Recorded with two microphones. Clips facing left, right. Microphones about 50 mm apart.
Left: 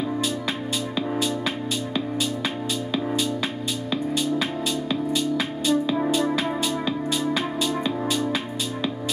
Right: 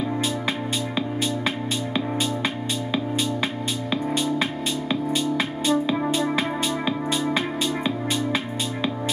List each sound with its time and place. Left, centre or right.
5.1 s music: right